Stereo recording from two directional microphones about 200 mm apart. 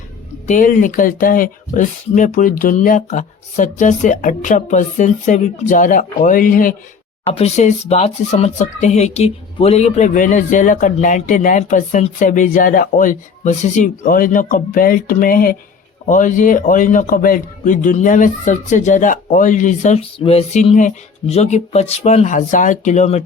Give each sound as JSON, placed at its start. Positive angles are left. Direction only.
{"t": 0.4, "sound": "speech", "side_deg": 40}
{"t": 7.3, "sound": "speech", "side_deg": 30}